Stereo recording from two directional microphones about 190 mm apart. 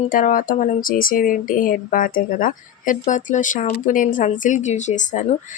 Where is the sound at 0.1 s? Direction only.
45° left (ahead or behind).